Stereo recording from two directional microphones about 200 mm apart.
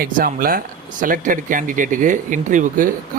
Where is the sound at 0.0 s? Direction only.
45° right (ahead or behind).